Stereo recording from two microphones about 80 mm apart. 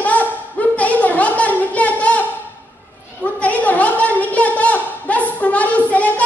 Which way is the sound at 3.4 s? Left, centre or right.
Centre.